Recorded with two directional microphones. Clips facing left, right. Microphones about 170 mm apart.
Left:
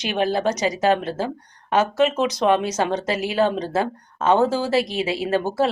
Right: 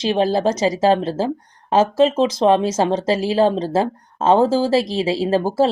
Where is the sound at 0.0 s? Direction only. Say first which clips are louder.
Right 4 dB; 30° right (ahead or behind).